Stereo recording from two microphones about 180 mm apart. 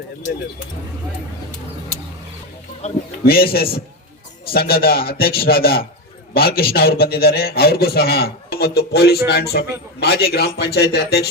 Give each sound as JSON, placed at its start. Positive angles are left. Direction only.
{"t": 3.2, "sound": "a man's voice", "side_deg": 60}